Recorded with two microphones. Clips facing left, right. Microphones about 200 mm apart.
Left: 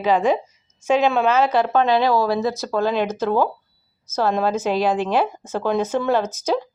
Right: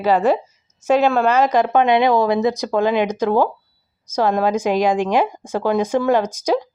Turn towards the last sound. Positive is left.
turn(degrees=-10)  # may be behind; listen again after turning